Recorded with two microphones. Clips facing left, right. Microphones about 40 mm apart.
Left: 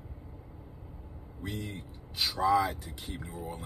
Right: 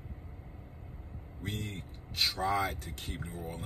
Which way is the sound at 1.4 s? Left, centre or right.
Right.